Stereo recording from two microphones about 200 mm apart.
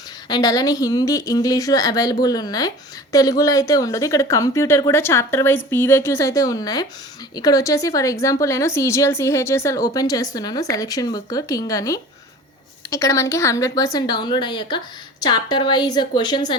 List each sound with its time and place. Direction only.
0.3 s a woman's voice: 20° left (ahead or behind)